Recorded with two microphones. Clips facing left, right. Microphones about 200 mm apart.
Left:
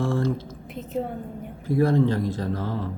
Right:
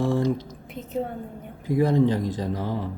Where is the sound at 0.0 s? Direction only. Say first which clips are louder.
Right 2 dB; 15° right (ahead or behind).